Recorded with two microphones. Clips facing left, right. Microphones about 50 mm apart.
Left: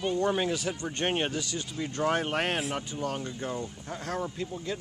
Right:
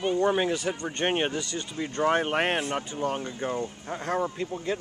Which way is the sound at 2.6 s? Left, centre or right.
Centre.